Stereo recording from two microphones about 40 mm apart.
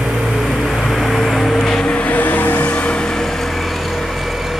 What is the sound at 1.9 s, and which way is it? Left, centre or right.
Vehicle, left.